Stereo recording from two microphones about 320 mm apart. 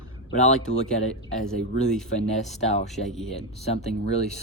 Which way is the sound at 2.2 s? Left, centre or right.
Centre.